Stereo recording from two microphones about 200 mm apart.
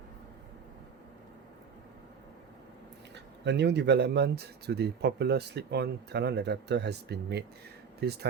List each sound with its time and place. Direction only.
3.4 s speech: 60° right (ahead or behind)